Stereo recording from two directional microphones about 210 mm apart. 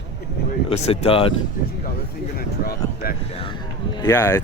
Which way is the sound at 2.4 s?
45° left (ahead or behind).